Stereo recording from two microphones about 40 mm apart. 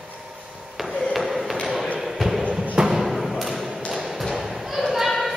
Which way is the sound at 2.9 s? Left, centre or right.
Centre.